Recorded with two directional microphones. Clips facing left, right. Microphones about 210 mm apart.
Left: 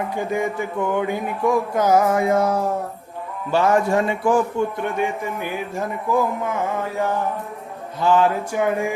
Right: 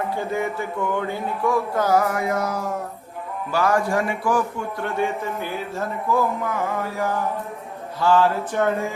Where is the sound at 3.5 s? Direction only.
25° left (ahead or behind).